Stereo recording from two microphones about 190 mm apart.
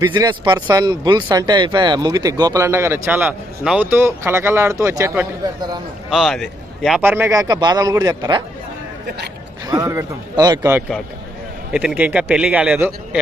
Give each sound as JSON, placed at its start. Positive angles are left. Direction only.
{"t": 0.1, "sound": "speech", "side_deg": -25}
{"t": 6.1, "sound": "speech", "side_deg": 0}
{"t": 7.0, "sound": "speech", "side_deg": -10}
{"t": 9.6, "sound": "a man's voice", "side_deg": -15}